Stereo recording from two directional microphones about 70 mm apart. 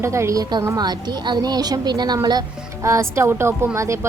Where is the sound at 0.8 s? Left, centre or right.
Right.